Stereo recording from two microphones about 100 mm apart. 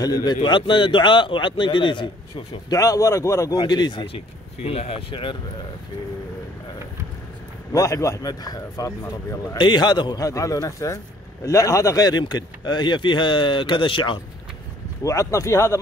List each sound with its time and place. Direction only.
0.0 s speech: 45° left (ahead or behind)
2.7 s speech: 35° left (ahead or behind)
3.5 s speech: 45° left (ahead or behind)
4.6 s speech: 75° left (ahead or behind); by 5.4 s 55° left (ahead or behind)
7.7 s speech: 30° left (ahead or behind); by 10.2 s 45° left (ahead or behind)
10.2 s speech: 35° left (ahead or behind); by 14.2 s 60° left (ahead or behind)
15.0 s speech: 30° left (ahead or behind)